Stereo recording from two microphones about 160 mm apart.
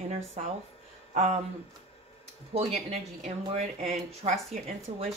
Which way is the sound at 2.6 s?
40° right (ahead or behind).